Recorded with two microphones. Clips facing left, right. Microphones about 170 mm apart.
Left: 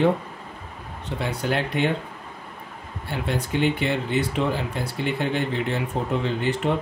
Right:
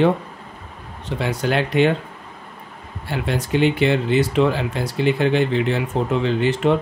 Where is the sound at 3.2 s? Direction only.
90° right.